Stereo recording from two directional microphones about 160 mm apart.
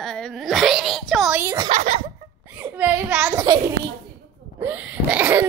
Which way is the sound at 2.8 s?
10° right (ahead or behind).